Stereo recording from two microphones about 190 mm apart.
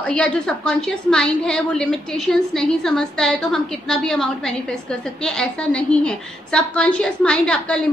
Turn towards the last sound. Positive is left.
turn(degrees=5)  # may be behind; listen again after turning